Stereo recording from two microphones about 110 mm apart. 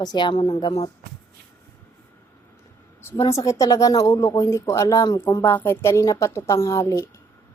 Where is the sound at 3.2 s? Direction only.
25° left (ahead or behind).